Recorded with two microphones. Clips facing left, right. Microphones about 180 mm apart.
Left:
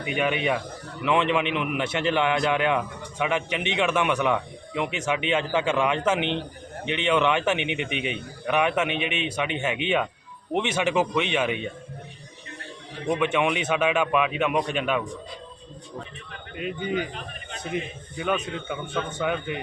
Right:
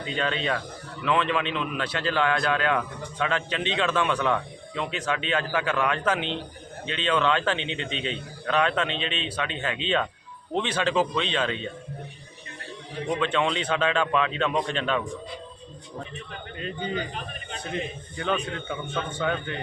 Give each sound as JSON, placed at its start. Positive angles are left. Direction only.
{"t": 0.0, "sound": "a man's voice", "side_deg": 15}
{"t": 13.1, "sound": "speech", "side_deg": 10}
{"t": 18.2, "sound": "speech", "side_deg": 5}